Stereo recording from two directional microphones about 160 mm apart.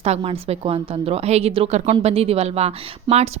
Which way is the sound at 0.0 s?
40° right (ahead or behind).